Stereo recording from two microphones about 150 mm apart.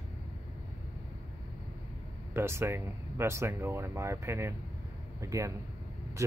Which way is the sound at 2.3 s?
15° right (ahead or behind).